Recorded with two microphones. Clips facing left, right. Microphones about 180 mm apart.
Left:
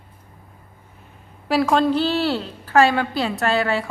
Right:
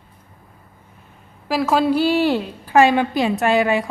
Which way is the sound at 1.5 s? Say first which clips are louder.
Even; 5° right (ahead or behind).